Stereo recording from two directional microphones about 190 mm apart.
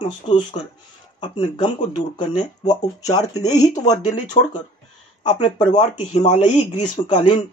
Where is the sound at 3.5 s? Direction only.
40° left (ahead or behind).